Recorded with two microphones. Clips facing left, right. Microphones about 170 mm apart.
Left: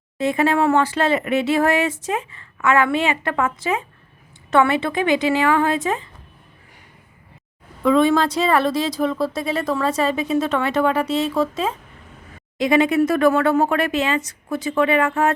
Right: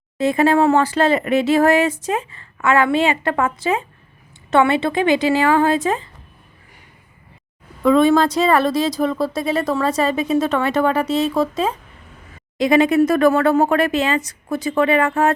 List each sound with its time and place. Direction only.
0.2 s speech: 35° right (ahead or behind)
7.9 s speech: 45° right (ahead or behind)